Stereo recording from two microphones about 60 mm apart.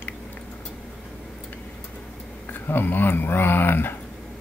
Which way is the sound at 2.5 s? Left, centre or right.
Left.